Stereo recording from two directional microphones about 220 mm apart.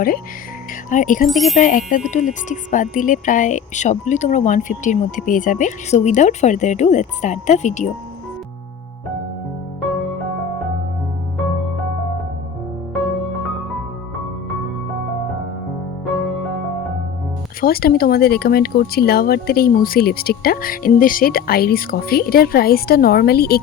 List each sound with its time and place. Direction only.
0.9 s speech: 35° left (ahead or behind)
1.3 s speech: centre (ahead or behind)
1.5 s speech: 35° left (ahead or behind)
17.6 s speech: 45° left (ahead or behind)